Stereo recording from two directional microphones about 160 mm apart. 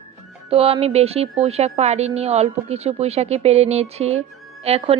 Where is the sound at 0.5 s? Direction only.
40° right (ahead or behind).